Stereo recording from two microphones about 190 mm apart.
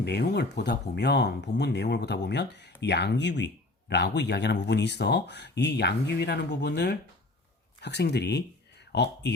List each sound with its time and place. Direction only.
0.0 s speech: 60° left (ahead or behind)